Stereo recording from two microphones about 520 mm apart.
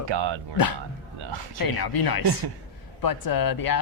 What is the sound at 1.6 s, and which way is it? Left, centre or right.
Speech, left.